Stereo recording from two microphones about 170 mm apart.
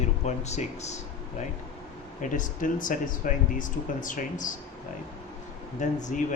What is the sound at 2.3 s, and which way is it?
Speech, 50° left (ahead or behind).